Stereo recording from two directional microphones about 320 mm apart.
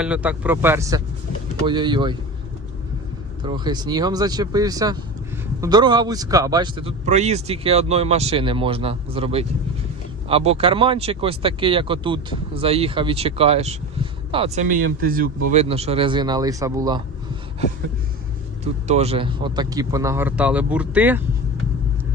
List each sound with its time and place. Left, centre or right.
0.0 s speech: centre
3.4 s speech: centre
18.6 s speech: centre